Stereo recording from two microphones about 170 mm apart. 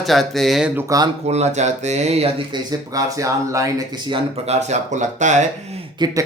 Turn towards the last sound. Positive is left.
turn(degrees=-25)  # may be behind; listen again after turning